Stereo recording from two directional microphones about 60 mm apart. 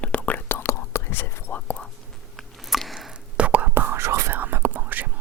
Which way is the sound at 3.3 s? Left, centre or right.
Right.